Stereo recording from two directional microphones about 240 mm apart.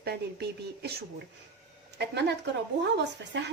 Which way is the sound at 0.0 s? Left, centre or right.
Right.